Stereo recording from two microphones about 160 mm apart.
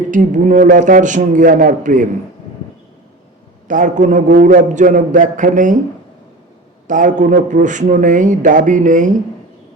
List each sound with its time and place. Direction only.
0.1 s a man's voice: 55° right (ahead or behind)
3.7 s a man's voice: 55° right (ahead or behind)
6.8 s a man's voice: 55° right (ahead or behind)